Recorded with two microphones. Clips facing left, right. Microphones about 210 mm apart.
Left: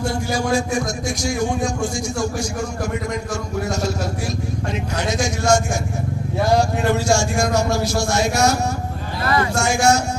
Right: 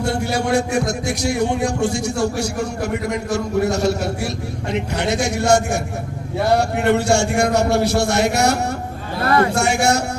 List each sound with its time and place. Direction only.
0.0 s a man's voice: 65° right (ahead or behind)